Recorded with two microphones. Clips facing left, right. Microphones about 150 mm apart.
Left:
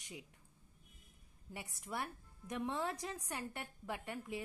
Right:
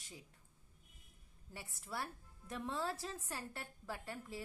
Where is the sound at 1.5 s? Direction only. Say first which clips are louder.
Left 2 dB; 20° left (ahead or behind).